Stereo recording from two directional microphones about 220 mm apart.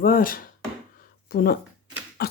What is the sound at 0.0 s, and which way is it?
Speech, 40° left (ahead or behind).